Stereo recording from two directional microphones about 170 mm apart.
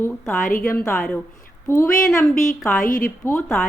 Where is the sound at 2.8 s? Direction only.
55° left (ahead or behind).